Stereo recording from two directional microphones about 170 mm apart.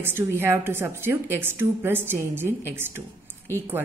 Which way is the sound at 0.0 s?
15° right (ahead or behind).